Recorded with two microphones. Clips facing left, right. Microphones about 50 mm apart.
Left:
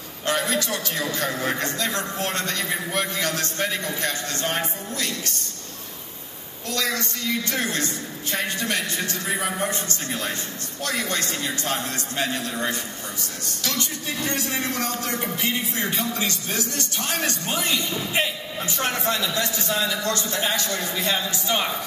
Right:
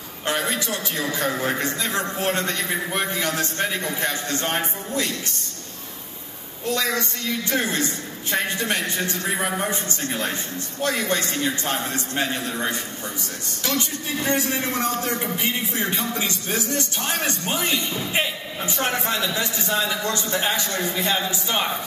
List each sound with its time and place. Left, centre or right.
0.3 s a man's voice: right
6.7 s a man's voice: right
13.7 s a man's voice: right